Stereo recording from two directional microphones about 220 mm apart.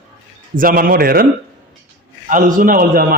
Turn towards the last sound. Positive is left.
turn(degrees=-40)  # may be behind; listen again after turning